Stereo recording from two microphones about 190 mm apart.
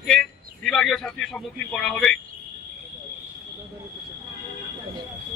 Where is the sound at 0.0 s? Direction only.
5° left (ahead or behind).